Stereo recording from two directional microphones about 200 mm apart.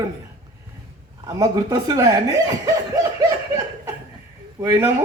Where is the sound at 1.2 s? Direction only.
15° right (ahead or behind).